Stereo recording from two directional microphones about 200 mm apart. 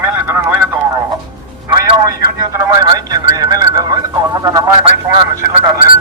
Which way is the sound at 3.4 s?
20° right (ahead or behind).